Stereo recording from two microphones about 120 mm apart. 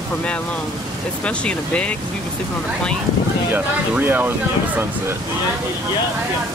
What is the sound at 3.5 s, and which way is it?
Speech, 15° right (ahead or behind).